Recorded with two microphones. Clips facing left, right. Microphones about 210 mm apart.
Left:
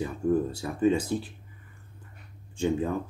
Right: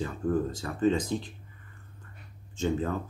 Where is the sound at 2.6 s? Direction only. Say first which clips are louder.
Left 2 dB; 15° left (ahead or behind).